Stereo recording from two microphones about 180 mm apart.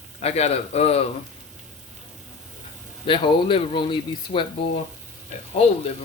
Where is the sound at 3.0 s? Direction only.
30° left (ahead or behind).